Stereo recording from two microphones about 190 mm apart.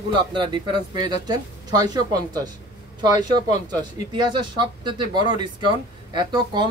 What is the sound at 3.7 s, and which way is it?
Speech, 25° right (ahead or behind).